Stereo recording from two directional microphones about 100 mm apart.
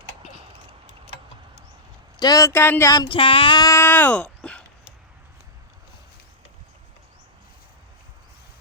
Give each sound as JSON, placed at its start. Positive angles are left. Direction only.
{"t": 2.1, "sound": "speech", "side_deg": 40}
{"t": 2.5, "sound": "speech", "side_deg": 25}
{"t": 3.1, "sound": "female singing", "side_deg": 60}
{"t": 3.8, "sound": "a sound", "side_deg": 20}